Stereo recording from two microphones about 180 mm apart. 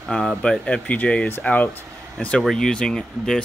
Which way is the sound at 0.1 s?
5° left (ahead or behind).